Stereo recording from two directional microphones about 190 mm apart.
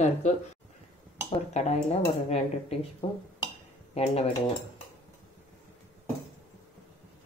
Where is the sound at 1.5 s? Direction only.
35° left (ahead or behind).